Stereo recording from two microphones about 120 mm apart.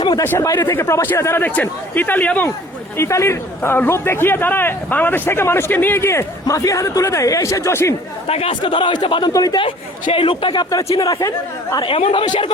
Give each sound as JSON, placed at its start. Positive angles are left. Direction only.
{"t": 0.2, "sound": "a man's voice", "side_deg": 25}
{"t": 8.3, "sound": "a woman's voice", "side_deg": 55}
{"t": 9.6, "sound": "a woman's voice", "side_deg": 45}